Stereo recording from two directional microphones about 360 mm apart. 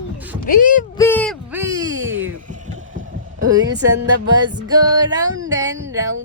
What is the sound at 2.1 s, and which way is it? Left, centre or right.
Speech, right.